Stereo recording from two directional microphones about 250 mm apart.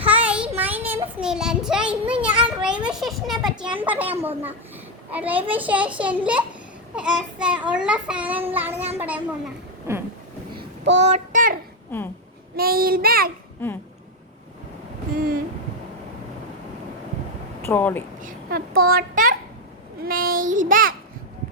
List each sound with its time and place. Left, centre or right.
0.0 s child singing: centre
0.9 s a child's voice: centre
2.2 s children playing: centre
3.4 s a child's voice: centre
10.6 s child singing: right
11.0 s child singing: right
12.5 s child singing: right
17.6 s speech: centre
18.2 s a child's voice: right
20.1 s child singing: right